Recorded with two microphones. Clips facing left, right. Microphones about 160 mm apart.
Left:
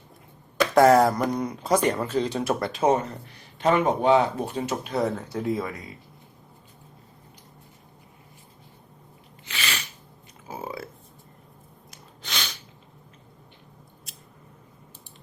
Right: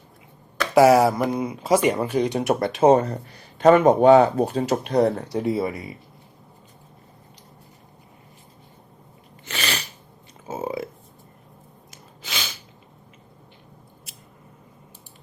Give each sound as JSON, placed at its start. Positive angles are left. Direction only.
{"t": 0.7, "sound": "speech", "side_deg": -10}
{"t": 2.8, "sound": "speech", "side_deg": -35}
{"t": 3.7, "sound": "speech", "side_deg": -45}
{"t": 5.3, "sound": "speech", "side_deg": -10}
{"t": 9.5, "sound": "sneeze", "side_deg": -40}
{"t": 10.5, "sound": "a sound", "side_deg": -20}
{"t": 11.9, "sound": "gasp", "side_deg": -5}